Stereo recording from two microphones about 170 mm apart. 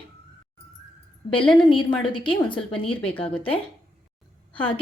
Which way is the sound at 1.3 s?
30° left (ahead or behind).